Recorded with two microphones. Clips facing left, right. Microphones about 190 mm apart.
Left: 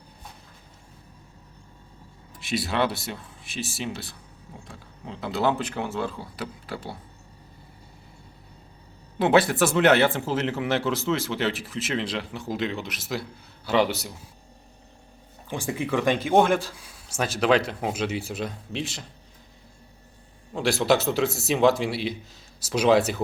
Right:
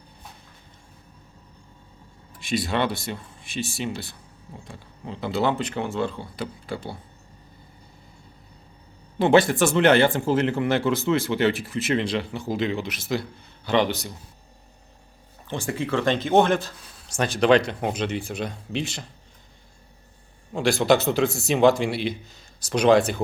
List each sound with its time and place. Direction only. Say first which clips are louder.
2.4 s speech: right 1 dB; 5° left (ahead or behind)
9.1 s a man's voice: right 2 dB; 5° left (ahead or behind)
15.4 s speech: right 1 dB; 15° left (ahead or behind)
20.5 s speech: right 2 dB; centre (ahead or behind)